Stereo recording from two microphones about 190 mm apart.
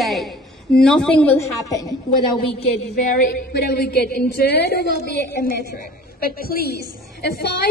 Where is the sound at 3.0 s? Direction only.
50° left (ahead or behind).